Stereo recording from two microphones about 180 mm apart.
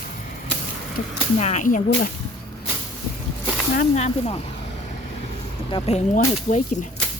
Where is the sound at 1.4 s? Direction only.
40° left (ahead or behind).